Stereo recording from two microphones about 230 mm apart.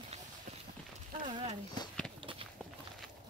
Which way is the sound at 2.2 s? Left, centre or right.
Right.